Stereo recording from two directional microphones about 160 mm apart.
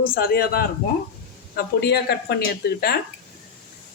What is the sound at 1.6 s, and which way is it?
Speech, 90° left.